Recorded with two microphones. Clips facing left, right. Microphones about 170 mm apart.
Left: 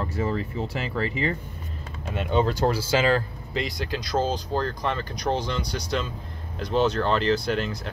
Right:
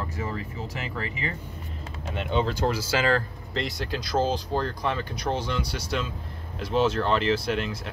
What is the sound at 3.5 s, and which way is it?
Speech, centre (ahead or behind).